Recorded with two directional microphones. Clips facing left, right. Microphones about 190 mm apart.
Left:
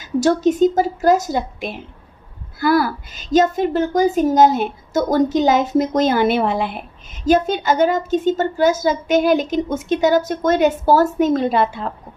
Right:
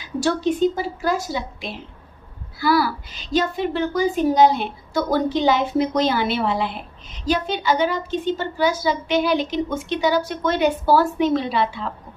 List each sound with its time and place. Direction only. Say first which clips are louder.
0.0 s a woman's voice: left 6 dB; 45° left (ahead or behind)